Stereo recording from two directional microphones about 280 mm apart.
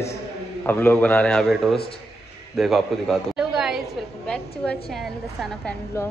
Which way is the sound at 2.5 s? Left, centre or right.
Centre.